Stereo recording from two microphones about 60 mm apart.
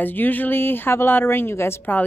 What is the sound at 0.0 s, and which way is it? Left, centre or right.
A woman's voice, left.